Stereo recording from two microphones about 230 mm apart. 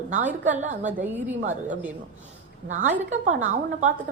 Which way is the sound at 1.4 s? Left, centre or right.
Right.